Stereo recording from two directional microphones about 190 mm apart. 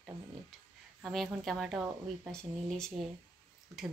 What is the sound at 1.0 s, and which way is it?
Speech, centre (ahead or behind).